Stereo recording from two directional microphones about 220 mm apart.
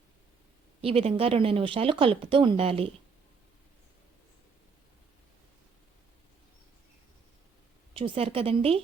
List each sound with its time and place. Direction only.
0.8 s speech: 25° right (ahead or behind)
7.9 s speech: 25° right (ahead or behind)